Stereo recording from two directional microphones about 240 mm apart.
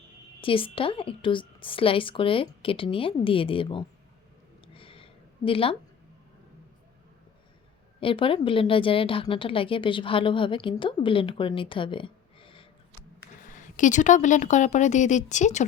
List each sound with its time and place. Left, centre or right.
0.4 s a woman's voice: left
4.6 s a sound: left
8.0 s a woman's voice: left
13.5 s a woman's voice: left